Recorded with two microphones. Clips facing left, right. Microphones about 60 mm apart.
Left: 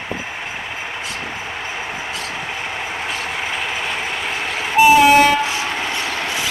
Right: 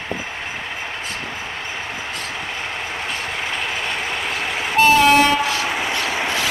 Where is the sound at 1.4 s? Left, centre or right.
Centre.